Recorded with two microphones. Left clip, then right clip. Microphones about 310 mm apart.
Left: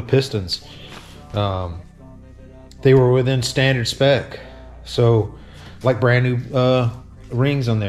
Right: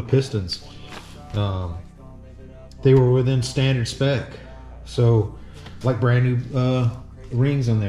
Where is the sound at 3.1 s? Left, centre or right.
Centre.